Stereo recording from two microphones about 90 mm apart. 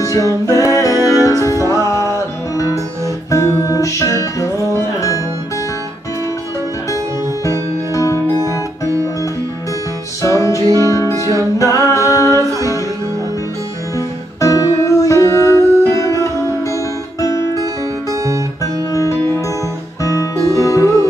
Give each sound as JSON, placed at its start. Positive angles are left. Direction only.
{"t": 0.0, "sound": "music", "side_deg": 40}
{"t": 7.9, "sound": "music", "side_deg": 35}
{"t": 10.2, "sound": "music", "side_deg": 35}
{"t": 13.9, "sound": "music", "side_deg": 35}
{"t": 18.1, "sound": "guitar", "side_deg": -35}
{"t": 18.6, "sound": "guitar", "side_deg": 35}
{"t": 20.0, "sound": "music", "side_deg": 35}